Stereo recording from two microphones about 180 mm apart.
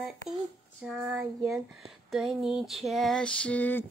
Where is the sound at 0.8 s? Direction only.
5° right (ahead or behind).